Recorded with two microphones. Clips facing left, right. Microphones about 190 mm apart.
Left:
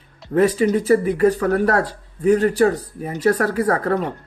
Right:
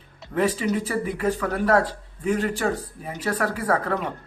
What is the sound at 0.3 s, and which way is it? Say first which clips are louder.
Speech: left 7 dB; 45° left (ahead or behind).